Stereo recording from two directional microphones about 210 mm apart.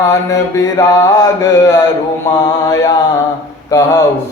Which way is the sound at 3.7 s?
15° left (ahead or behind).